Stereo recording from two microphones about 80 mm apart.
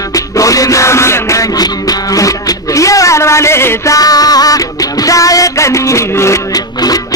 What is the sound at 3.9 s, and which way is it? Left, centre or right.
Music, left.